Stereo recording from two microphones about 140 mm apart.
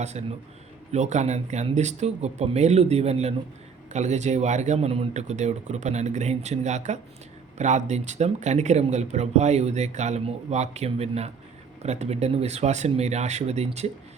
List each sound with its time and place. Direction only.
0.0 s speech: 50° right (ahead or behind)